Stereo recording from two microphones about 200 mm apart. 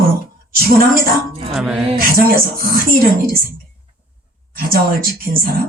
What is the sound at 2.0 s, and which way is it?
Speech, 45° right (ahead or behind).